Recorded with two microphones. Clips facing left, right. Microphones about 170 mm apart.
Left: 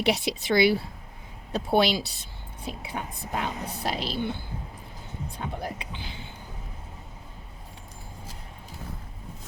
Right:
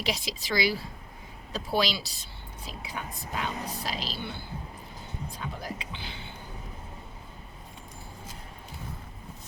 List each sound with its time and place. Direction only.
0.0 s speech: 60° left (ahead or behind)